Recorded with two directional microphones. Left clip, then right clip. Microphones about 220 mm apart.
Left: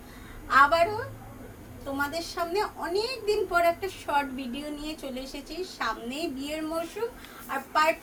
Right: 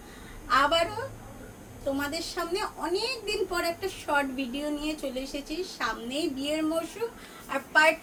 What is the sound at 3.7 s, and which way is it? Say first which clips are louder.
Speech: even; 20° right (ahead or behind).